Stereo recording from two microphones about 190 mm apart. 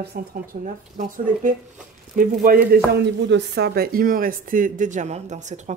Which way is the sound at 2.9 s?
70° right (ahead or behind).